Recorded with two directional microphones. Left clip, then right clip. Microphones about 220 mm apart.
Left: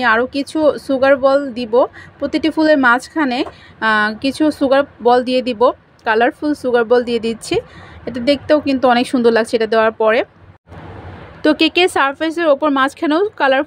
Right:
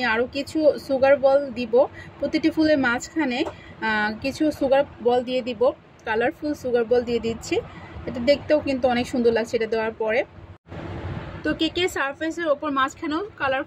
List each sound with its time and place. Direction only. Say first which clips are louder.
0.0 s speech: left 8 dB; 35° left (ahead or behind)
11.4 s speech: left 11 dB; 45° left (ahead or behind)